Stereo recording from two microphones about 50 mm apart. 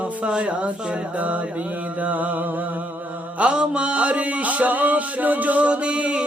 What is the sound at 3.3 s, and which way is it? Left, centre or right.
Music, centre.